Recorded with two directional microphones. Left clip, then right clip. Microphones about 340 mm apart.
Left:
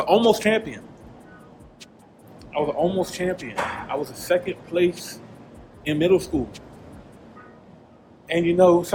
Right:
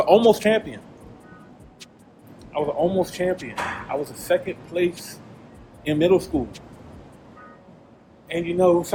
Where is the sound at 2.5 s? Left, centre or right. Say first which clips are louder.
Even; centre.